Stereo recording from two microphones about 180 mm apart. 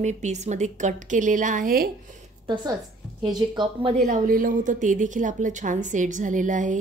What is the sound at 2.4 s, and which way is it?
A woman's voice, 25° right (ahead or behind).